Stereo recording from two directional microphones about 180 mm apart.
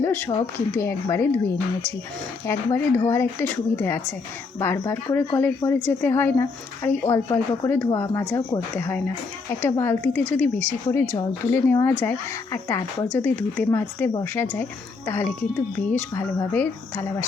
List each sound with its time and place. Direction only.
0.0 s speech: 5° left (ahead or behind)